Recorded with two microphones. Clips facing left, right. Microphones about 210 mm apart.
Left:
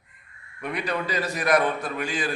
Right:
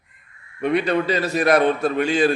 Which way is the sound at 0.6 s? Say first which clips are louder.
Right 9 dB; 25° right (ahead or behind).